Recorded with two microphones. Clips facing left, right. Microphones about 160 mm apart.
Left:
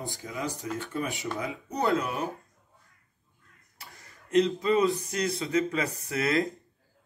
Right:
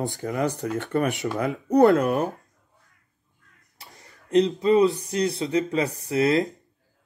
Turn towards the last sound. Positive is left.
turn(degrees=-30)  # may be behind; listen again after turning